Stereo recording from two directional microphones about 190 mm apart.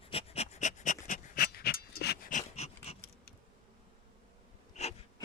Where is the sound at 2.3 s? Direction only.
40° left (ahead or behind).